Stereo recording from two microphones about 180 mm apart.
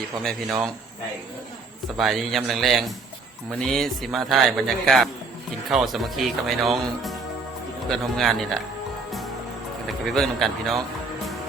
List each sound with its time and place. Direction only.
0.2 s speech: centre (ahead or behind)
2.0 s speech: centre (ahead or behind)
9.8 s speech: centre (ahead or behind)